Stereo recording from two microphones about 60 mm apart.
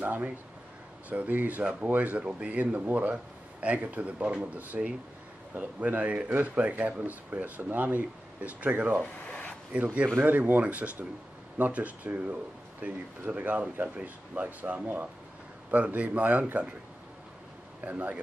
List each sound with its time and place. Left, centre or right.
0.0 s speech: right
9.0 s a sound: left
10.1 s speech: right
17.8 s speech: right